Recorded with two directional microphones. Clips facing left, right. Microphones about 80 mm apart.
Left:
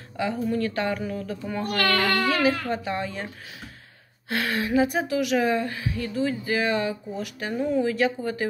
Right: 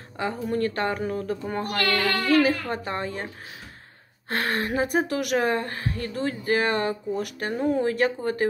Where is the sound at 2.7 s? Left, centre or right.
Right.